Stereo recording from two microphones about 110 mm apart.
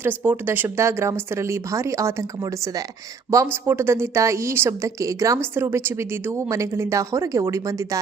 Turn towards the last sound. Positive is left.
turn(degrees=-30)  # may be behind; listen again after turning